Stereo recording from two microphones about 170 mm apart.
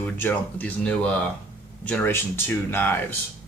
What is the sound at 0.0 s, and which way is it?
Speech, 10° left (ahead or behind).